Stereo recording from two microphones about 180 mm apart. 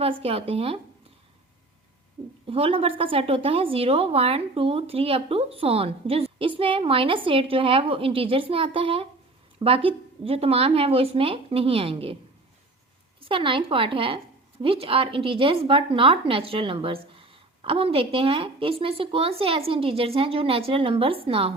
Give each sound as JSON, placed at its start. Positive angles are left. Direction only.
{"t": 0.0, "sound": "a woman's voice", "side_deg": -35}
{"t": 2.5, "sound": "a woman's voice", "side_deg": -30}
{"t": 13.2, "sound": "a woman's voice", "side_deg": -30}